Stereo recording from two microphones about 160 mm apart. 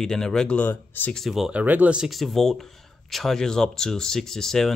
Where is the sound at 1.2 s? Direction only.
Centre (ahead or behind).